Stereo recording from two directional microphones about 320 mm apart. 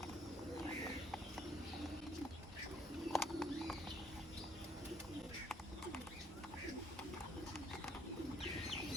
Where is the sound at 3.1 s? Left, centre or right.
Centre.